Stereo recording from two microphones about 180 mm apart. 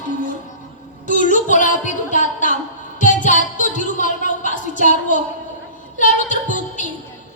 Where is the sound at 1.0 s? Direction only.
45° left (ahead or behind).